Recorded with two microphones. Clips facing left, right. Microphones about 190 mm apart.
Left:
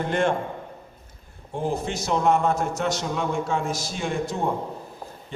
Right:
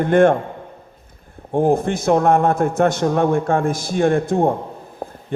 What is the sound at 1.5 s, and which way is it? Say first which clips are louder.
A man's voice: right 10 dB; 55° right (ahead or behind).